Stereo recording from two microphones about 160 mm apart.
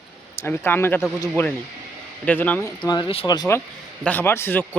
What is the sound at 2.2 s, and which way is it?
Speech, 10° left (ahead or behind).